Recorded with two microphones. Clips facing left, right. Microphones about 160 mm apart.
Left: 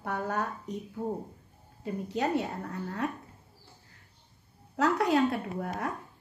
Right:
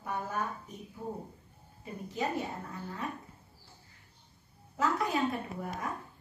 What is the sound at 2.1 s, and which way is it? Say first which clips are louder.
Speech: left 4 dB; 70° left (ahead or behind).